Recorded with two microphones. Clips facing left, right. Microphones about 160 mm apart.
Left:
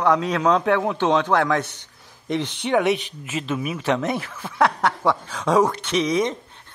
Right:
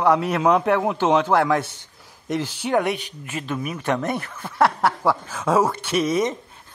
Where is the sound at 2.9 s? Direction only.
20° left (ahead or behind).